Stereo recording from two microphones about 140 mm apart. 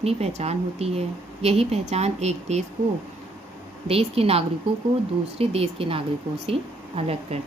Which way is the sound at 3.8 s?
45° right (ahead or behind).